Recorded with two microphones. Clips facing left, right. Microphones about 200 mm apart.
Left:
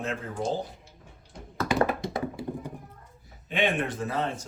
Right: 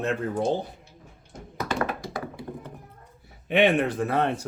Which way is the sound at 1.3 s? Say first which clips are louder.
Right 2 dB; 45° right (ahead or behind).